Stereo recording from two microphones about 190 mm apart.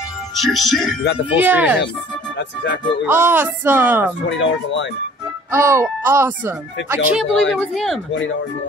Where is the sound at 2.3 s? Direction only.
70° left (ahead or behind).